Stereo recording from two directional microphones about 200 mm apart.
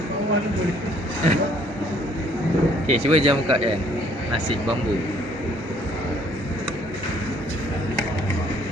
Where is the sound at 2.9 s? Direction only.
35° right (ahead or behind).